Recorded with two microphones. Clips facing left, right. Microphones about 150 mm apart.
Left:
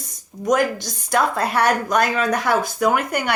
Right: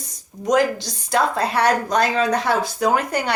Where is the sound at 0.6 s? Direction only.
55° left (ahead or behind).